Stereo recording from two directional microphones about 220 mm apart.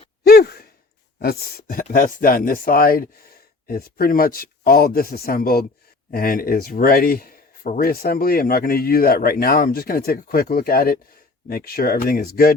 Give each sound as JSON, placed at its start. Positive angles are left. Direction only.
{"t": 0.3, "sound": "sigh", "side_deg": 45}
{"t": 1.2, "sound": "speech", "side_deg": 45}